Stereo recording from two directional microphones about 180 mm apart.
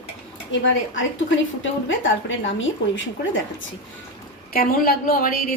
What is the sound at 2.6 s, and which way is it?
Speech, 90° left.